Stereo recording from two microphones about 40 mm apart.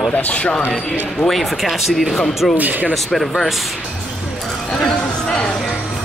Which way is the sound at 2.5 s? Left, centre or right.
Right.